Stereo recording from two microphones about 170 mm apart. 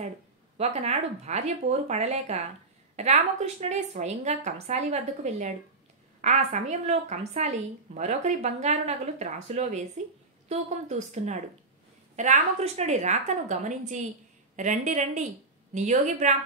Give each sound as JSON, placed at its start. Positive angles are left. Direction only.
{"t": 0.6, "sound": "a woman's voice", "side_deg": -40}